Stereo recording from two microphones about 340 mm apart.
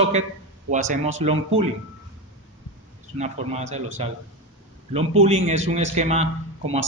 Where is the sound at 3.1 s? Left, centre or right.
Centre.